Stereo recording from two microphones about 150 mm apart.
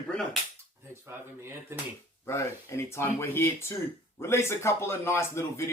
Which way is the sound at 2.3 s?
20° left (ahead or behind).